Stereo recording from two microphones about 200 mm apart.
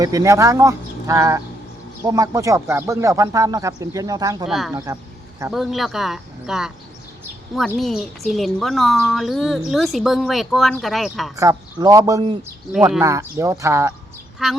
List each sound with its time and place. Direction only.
0.0 s speech: 15° right (ahead or behind)
4.4 s a woman's voice: centre (ahead or behind)
7.8 s a woman's voice: centre (ahead or behind)
11.3 s speech: 15° right (ahead or behind)
14.4 s a woman's voice: centre (ahead or behind)